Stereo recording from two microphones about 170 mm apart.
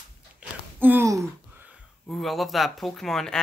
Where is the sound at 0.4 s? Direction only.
10° right (ahead or behind).